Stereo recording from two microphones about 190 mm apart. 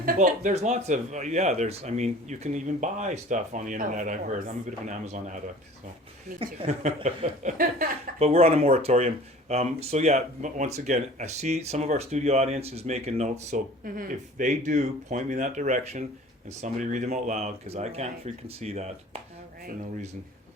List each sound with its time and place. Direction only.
0.0 s speech: 50° right (ahead or behind)
6.4 s speech: 35° right (ahead or behind)
7.6 s a woman's voice: 50° right (ahead or behind)
8.2 s speech: 35° right (ahead or behind)